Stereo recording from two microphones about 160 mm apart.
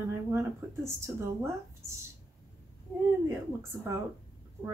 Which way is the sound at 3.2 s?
15° right (ahead or behind).